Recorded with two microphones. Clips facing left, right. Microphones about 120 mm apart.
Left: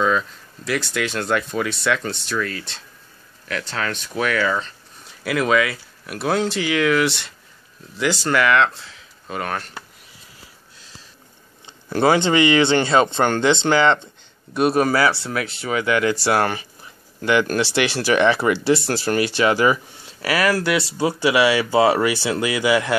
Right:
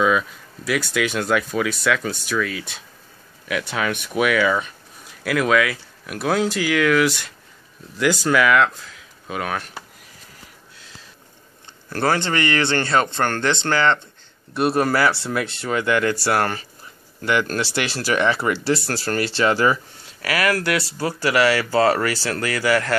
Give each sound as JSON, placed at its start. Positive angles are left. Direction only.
{"t": 0.7, "sound": "speech", "side_deg": -5}
{"t": 5.2, "sound": "speech", "side_deg": 0}
{"t": 11.9, "sound": "speech", "side_deg": 15}
{"t": 14.6, "sound": "speech", "side_deg": 0}